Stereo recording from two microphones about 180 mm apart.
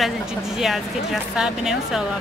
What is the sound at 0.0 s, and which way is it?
A woman's voice, centre (ahead or behind).